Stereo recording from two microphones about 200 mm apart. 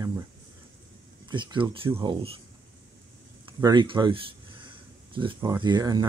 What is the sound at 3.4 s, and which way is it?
Speech, 20° right (ahead or behind).